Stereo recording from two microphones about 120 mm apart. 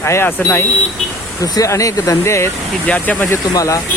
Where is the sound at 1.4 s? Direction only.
30° left (ahead or behind); by 3.4 s 15° left (ahead or behind).